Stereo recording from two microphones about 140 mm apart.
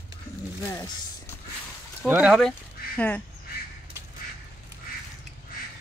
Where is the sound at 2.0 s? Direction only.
10° right (ahead or behind).